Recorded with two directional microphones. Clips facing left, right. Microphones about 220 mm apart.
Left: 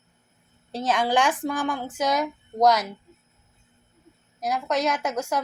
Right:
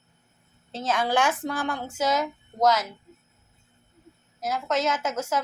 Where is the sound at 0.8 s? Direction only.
15° left (ahead or behind).